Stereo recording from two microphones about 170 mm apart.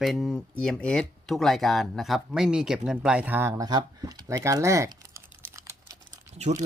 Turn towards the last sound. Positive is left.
turn(degrees=-40)  # may be behind; listen again after turning